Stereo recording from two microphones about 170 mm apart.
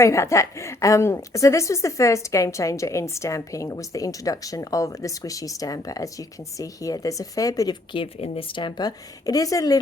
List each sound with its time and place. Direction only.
0.0 s a woman's voice: 15° left (ahead or behind)